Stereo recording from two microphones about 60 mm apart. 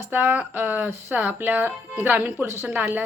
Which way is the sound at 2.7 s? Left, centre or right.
Right.